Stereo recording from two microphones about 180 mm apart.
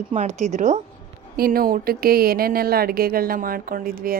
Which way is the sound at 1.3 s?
55° right (ahead or behind).